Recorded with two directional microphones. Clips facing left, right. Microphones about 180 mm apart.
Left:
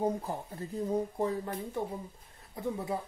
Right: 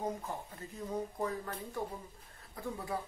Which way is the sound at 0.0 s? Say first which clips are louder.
Left 6 dB; 30° left (ahead or behind).